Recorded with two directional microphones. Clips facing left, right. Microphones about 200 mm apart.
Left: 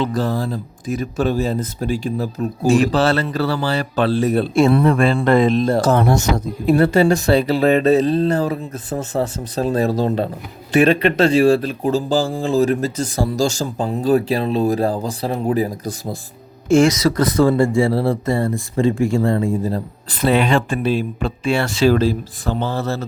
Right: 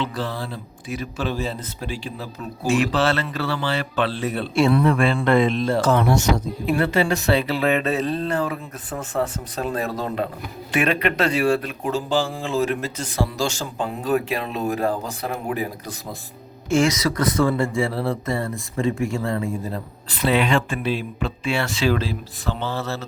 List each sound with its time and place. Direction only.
0.0 s speech: 45° left (ahead or behind)